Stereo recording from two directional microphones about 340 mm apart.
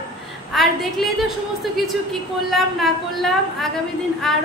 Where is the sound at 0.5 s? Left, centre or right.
Centre.